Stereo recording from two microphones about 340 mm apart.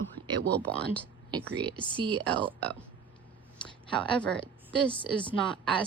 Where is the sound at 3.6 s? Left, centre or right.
Centre.